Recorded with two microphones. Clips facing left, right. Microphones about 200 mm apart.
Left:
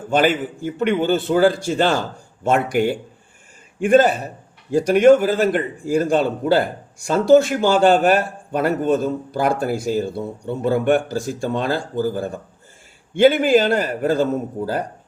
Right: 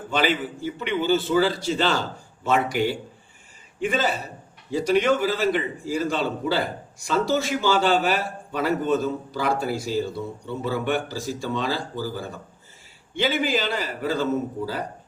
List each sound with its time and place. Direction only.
0.1 s a man's voice: 50° left (ahead or behind)